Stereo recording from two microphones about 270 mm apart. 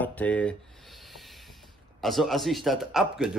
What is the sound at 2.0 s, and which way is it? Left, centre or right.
Speech, centre.